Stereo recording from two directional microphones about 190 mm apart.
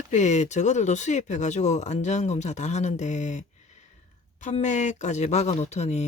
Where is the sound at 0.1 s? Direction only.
40° left (ahead or behind).